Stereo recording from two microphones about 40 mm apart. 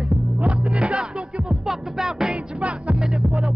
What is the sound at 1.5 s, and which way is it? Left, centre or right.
Music, centre.